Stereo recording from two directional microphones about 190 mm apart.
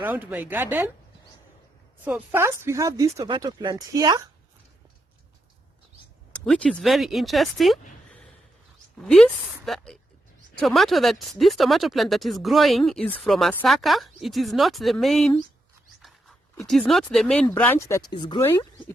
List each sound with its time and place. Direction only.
0.0 s speech: 10° right (ahead or behind)
2.0 s speech: 10° right (ahead or behind)
6.4 s speech: 5° left (ahead or behind)
16.6 s speech: centre (ahead or behind); by 18.4 s 25° left (ahead or behind)
18.4 s speech: 15° left (ahead or behind)